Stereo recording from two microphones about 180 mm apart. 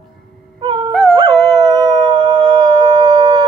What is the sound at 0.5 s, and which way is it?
Music, 25° right (ahead or behind).